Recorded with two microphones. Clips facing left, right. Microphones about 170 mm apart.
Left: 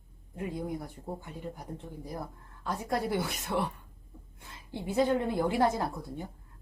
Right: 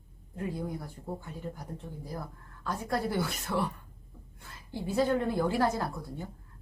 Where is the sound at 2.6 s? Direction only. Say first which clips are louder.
Even; 20° left (ahead or behind).